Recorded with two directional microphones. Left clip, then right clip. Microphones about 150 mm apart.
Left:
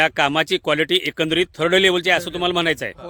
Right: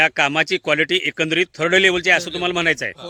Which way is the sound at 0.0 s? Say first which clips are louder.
Right 1 dB; 20° left (ahead or behind).